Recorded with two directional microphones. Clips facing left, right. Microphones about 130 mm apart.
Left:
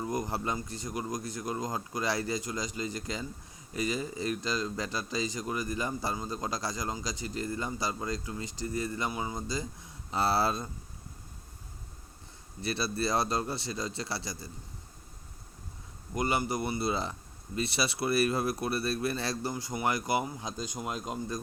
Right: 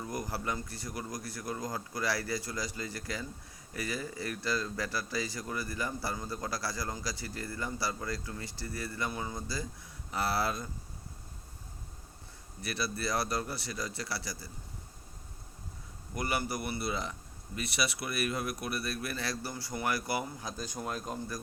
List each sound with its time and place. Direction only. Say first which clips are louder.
0.1 s speech: left 1 dB; 20° left (ahead or behind)
12.6 s speech: left 4 dB; 25° left (ahead or behind)
16.1 s speech: left 4 dB; 20° left (ahead or behind)